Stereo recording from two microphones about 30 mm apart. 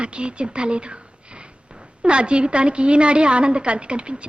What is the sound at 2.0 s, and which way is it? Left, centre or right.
A man's voice, right.